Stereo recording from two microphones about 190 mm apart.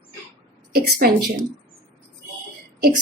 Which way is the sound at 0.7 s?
55° right (ahead or behind).